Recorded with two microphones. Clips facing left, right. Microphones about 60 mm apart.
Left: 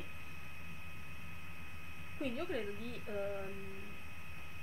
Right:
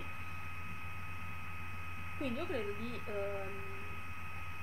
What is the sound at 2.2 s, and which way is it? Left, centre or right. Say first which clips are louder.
Speech: right 1 dB; centre.